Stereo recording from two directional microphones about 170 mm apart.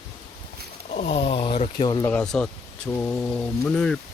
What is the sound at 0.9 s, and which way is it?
Speech, 35° left (ahead or behind).